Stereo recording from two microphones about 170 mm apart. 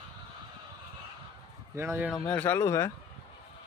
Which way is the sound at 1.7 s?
15° right (ahead or behind).